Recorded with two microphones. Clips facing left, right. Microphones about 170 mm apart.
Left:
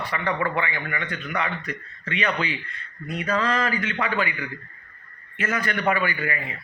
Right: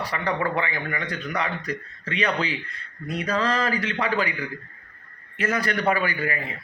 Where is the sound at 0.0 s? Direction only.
35° right (ahead or behind).